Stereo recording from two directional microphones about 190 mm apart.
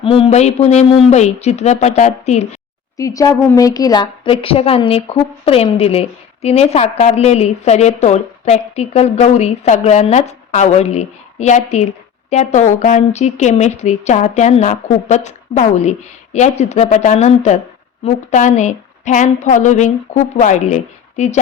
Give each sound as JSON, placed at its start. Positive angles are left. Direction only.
{"t": 0.0, "sound": "a woman's voice", "side_deg": 30}
{"t": 3.0, "sound": "a woman's voice", "side_deg": 20}